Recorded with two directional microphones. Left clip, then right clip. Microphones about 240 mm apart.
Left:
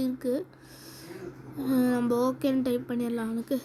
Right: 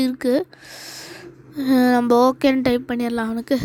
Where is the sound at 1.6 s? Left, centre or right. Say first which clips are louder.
Right 10 dB; right.